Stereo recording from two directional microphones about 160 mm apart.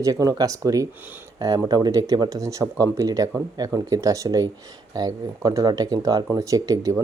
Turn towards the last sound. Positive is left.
turn(degrees=-20)  # may be behind; listen again after turning